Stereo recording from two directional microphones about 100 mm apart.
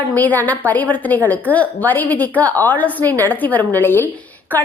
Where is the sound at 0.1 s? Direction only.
15° left (ahead or behind).